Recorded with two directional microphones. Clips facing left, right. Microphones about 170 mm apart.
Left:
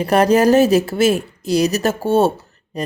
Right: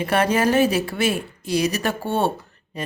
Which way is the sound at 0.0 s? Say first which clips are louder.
Left 6 dB; 40° left (ahead or behind).